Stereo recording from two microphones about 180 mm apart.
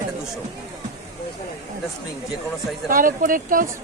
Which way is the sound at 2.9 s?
50° right (ahead or behind).